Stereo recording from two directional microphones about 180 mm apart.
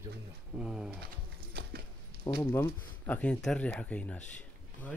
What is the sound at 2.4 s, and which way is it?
Speech, 10° left (ahead or behind).